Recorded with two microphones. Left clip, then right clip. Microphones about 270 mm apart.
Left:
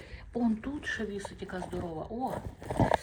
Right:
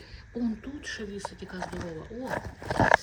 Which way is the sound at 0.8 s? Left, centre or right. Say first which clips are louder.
Right 1 dB; centre.